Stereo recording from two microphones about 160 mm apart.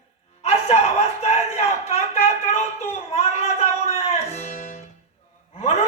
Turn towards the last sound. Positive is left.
turn(degrees=40)  # may be behind; listen again after turning